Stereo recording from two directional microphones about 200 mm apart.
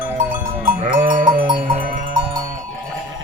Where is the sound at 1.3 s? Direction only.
25° right (ahead or behind).